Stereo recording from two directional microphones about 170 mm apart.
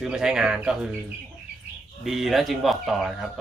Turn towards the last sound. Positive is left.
turn(degrees=0)  # may be behind; listen again after turning